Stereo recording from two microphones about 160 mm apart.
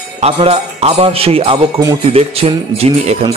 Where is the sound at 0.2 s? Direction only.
40° right (ahead or behind).